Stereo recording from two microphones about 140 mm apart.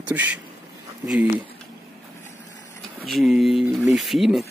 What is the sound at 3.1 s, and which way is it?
Speech, centre (ahead or behind).